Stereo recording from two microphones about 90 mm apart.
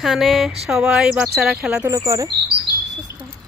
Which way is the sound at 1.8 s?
40° right (ahead or behind).